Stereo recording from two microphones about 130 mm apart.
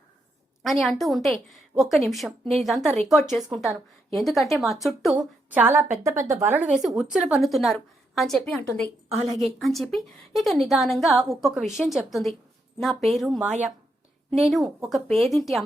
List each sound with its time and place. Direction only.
0.6 s a woman's voice: centre (ahead or behind)
5.5 s a woman's voice: 15° right (ahead or behind)
6.7 s a woman's voice: 5° right (ahead or behind)
9.1 s a woman's voice: 55° right (ahead or behind)
9.6 s a woman's voice: centre (ahead or behind)